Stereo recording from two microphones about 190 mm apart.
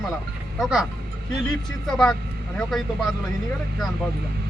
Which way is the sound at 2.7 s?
Centre (ahead or behind).